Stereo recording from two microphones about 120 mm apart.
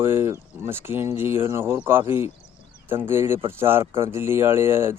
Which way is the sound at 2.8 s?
20° right (ahead or behind).